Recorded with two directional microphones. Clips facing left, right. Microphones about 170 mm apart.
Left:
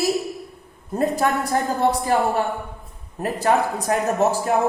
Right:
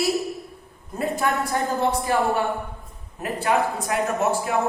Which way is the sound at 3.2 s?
40° left (ahead or behind).